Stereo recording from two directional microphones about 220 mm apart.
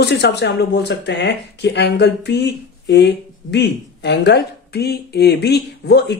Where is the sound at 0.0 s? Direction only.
50° left (ahead or behind).